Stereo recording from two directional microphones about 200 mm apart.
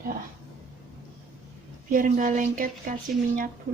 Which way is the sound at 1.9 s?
40° right (ahead or behind).